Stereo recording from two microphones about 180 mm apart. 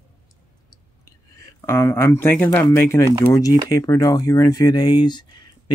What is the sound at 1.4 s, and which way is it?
Speech, 15° left (ahead or behind).